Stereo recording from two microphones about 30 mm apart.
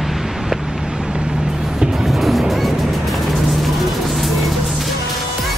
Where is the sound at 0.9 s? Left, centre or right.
Right.